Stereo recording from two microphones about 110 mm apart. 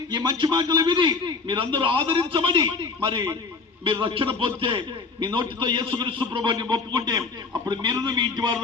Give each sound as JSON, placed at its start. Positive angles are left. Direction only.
{"t": 0.1, "sound": "a man's voice", "side_deg": -45}